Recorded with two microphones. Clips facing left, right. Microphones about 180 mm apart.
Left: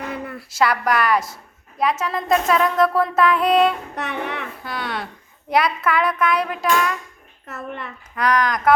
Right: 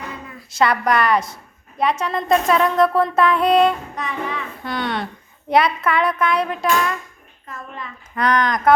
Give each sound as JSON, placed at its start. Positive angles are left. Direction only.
{"t": 0.1, "sound": "a sound", "side_deg": 65}
{"t": 0.5, "sound": "speech", "side_deg": 0}
{"t": 3.9, "sound": "music", "side_deg": 70}
{"t": 4.6, "sound": "speech", "side_deg": 5}
{"t": 7.4, "sound": "a child's voice", "side_deg": 70}
{"t": 8.1, "sound": "speech", "side_deg": 0}